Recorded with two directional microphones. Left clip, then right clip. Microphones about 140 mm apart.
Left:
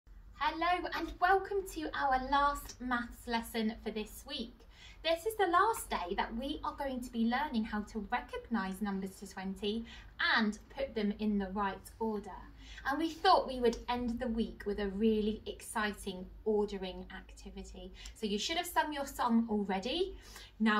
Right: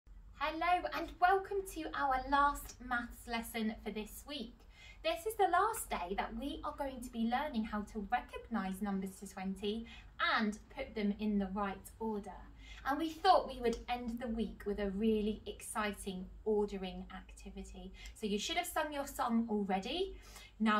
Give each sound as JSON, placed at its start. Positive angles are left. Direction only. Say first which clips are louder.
{"t": 0.4, "sound": "a woman's voice", "louder": "left 1 dB", "side_deg": -25}
{"t": 5.5, "sound": "a woman's voice", "louder": "left 3 dB", "side_deg": -25}